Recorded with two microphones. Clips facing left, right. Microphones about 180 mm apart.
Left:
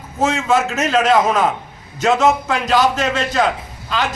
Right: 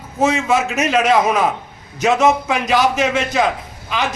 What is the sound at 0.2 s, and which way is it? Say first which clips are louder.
A man's voice: even; 5° right (ahead or behind).